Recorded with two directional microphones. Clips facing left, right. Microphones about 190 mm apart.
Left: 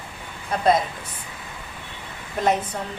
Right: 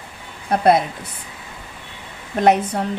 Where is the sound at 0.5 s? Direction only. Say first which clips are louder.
Right 4 dB; 70° right (ahead or behind).